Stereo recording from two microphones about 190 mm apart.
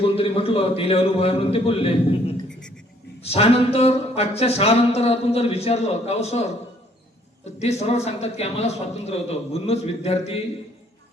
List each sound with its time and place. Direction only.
0.0 s speech: 30° left (ahead or behind)
7.6 s speech: 35° left (ahead or behind)